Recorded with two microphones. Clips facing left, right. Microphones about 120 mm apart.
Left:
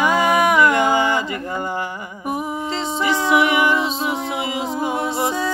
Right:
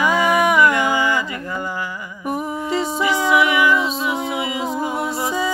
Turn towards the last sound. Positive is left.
turn(degrees=25)  # may be behind; listen again after turning